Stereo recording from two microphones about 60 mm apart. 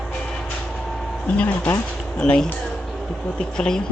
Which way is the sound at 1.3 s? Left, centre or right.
Left.